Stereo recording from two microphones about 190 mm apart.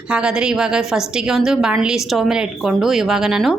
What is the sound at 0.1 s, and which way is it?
Speech, 5° right (ahead or behind).